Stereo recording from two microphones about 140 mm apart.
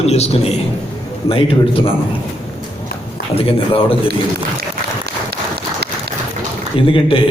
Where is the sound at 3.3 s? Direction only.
40° left (ahead or behind).